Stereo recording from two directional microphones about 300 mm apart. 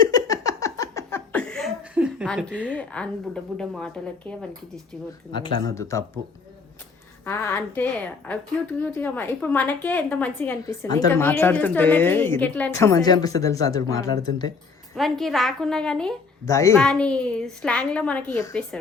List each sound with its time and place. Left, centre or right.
0.0 s laughter: centre
5.3 s a woman's voice: centre
7.3 s a woman's voice: centre
14.9 s a woman's voice: centre